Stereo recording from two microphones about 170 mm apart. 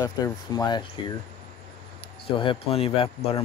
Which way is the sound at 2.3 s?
30° left (ahead or behind).